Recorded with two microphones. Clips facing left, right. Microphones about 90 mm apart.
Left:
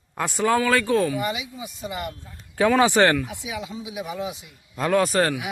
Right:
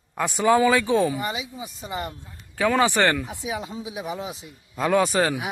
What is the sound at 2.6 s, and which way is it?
Speech, 15° left (ahead or behind).